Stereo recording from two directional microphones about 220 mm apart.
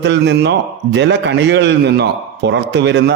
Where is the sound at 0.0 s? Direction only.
55° right (ahead or behind).